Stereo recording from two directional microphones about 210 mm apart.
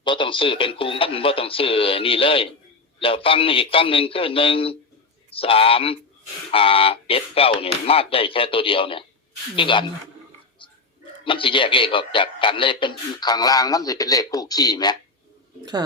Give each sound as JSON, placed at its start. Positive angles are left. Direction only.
{"t": 0.0, "sound": "a man's voice", "side_deg": 25}
{"t": 11.2, "sound": "a man's voice", "side_deg": 25}